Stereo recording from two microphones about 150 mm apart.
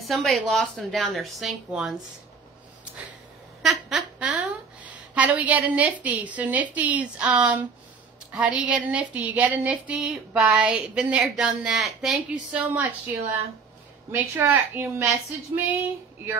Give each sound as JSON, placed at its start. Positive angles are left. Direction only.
{"t": 0.0, "sound": "speech", "side_deg": 0}
{"t": 3.6, "sound": "a sound", "side_deg": 0}
{"t": 6.0, "sound": "speech", "side_deg": -10}